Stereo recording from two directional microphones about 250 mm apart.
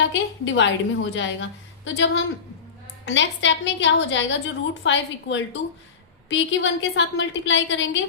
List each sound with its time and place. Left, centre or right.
0.1 s a woman's voice: left